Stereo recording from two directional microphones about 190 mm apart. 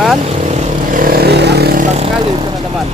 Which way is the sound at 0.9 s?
50° right (ahead or behind).